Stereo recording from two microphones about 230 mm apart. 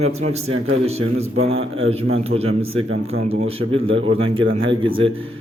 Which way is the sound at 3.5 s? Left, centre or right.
Right.